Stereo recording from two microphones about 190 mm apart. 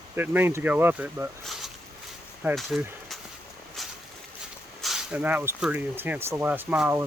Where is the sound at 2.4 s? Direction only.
5° right (ahead or behind).